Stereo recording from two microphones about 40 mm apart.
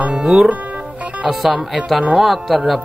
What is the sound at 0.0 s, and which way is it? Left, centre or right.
Music, right.